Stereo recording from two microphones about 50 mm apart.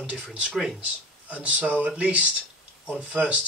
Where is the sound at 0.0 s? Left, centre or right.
Right.